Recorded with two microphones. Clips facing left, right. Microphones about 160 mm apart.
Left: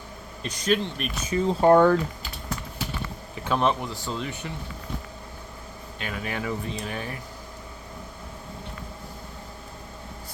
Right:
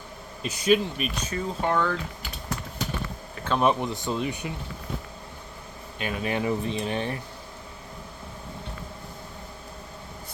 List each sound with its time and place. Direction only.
0.4 s speech: 10° right (ahead or behind)
1.3 s speech: 15° left (ahead or behind)
1.6 s speech: 40° left (ahead or behind)
3.6 s speech: 15° right (ahead or behind)
6.0 s speech: 20° right (ahead or behind)